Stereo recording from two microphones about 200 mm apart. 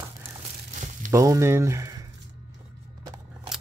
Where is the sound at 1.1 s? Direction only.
15° right (ahead or behind).